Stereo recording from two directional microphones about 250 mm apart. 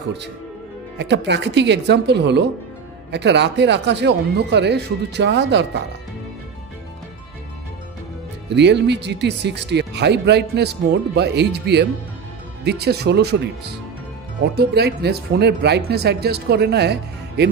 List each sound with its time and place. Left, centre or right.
0.9 s speech: right
8.5 s speech: right